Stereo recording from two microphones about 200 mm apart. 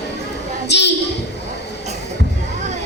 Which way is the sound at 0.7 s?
55° left (ahead or behind).